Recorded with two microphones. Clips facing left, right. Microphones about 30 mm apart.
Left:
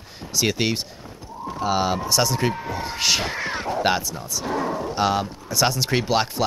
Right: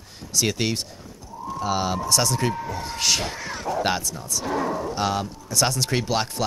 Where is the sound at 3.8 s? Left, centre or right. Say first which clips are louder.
Left 3 dB; centre.